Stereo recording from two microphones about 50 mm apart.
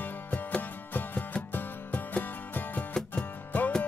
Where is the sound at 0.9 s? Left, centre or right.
Left.